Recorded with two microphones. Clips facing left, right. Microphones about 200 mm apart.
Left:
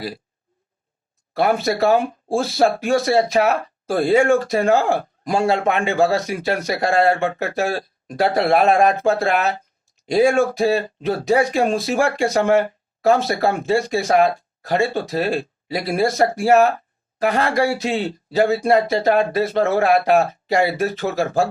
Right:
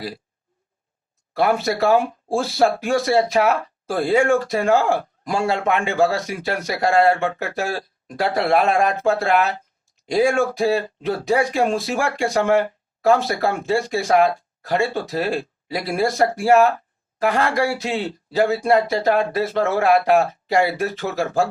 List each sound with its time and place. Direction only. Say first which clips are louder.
1.4 s speech: left 1 dB; 25° left (ahead or behind)
7.6 s speech: left 3 dB; 60° left (ahead or behind)
8.1 s speech: left 2 dB; 25° left (ahead or behind)